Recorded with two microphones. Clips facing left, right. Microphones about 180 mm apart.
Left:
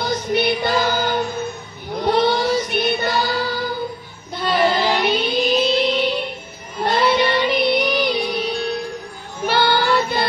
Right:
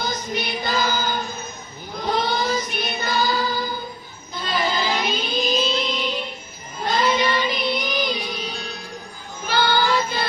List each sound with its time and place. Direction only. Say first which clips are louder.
0.0 s music: left 7 dB; 65° left (ahead or behind)
2.0 s child singing: left 5 dB; 65° left (ahead or behind)
4.4 s music: left 6 dB; 65° left (ahead or behind)
6.8 s child singing: left 4 dB; 65° left (ahead or behind)